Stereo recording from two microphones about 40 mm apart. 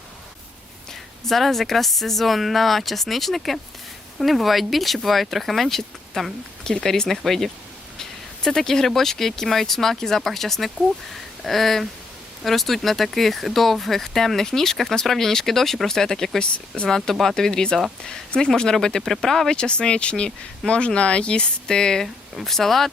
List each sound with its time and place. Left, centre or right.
1.2 s speech: centre
6.7 s speech: centre
11.1 s a sound: centre
12.4 s speech: centre
16.4 s speech: left
19.5 s speech: left
22.0 s speech: centre